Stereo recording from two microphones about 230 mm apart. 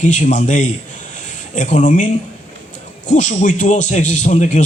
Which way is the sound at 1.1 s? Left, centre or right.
Left.